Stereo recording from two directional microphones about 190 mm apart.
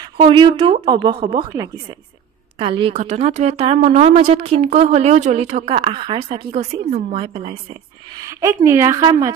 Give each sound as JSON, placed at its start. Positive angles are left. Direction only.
{"t": 0.3, "sound": "speech", "side_deg": -25}
{"t": 2.6, "sound": "a woman's voice", "side_deg": -30}
{"t": 8.2, "sound": "a woman's voice", "side_deg": -15}